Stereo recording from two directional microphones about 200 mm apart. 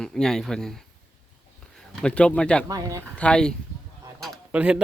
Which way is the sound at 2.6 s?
15° right (ahead or behind).